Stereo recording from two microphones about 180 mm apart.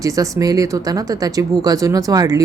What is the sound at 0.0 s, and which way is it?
Speech, 20° right (ahead or behind).